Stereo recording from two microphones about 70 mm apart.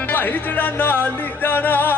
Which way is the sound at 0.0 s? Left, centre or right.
Left.